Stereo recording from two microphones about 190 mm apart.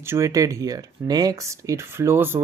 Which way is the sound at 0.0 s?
15° right (ahead or behind).